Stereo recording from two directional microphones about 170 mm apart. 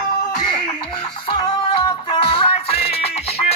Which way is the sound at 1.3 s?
30° left (ahead or behind).